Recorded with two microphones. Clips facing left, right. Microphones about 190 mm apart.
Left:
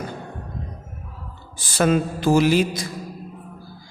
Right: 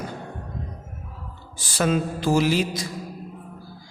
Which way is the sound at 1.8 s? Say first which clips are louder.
Left 3 dB; 55° left (ahead or behind).